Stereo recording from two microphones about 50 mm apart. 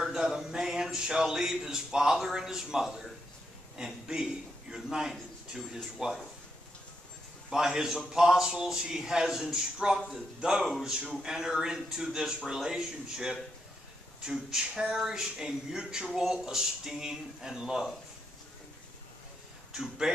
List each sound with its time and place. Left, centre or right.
0.0 s a man's voice: centre
6.0 s a man's voice: centre
7.4 s a man's voice: centre
19.7 s speech: centre